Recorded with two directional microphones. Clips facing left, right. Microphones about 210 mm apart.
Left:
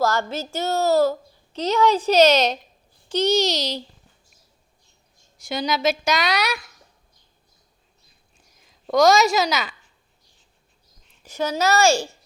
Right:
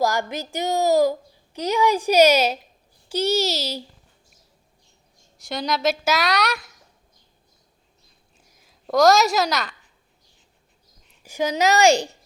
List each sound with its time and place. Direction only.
0.0 s a woman's voice: 15° right (ahead or behind)
5.4 s a woman's voice: centre (ahead or behind)
8.5 s a woman's voice: centre (ahead or behind)
11.2 s a woman's voice: 10° right (ahead or behind)